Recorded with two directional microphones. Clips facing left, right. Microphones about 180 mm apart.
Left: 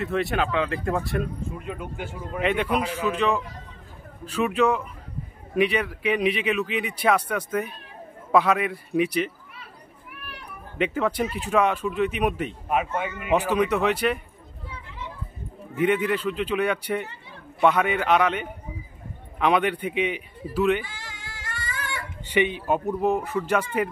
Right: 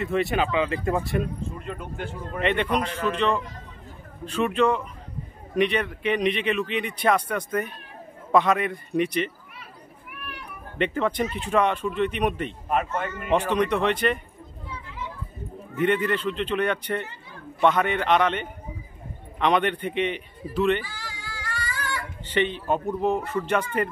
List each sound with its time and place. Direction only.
0.0 s a man's voice: centre (ahead or behind)
10.8 s speech: 5° left (ahead or behind)
15.7 s a man's voice: 10° left (ahead or behind)
20.8 s a sound: 25° left (ahead or behind)
22.2 s speech: 10° left (ahead or behind)